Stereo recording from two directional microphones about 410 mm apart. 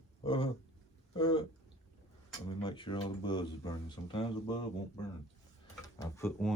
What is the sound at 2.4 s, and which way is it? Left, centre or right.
Speech, centre.